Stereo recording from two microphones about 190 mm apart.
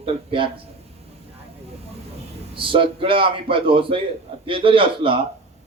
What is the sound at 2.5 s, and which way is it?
A man's voice, 25° right (ahead or behind).